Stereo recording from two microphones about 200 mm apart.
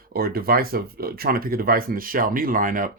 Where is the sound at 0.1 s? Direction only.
50° right (ahead or behind).